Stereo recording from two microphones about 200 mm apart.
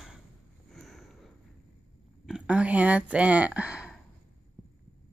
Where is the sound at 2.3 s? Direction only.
5° right (ahead or behind).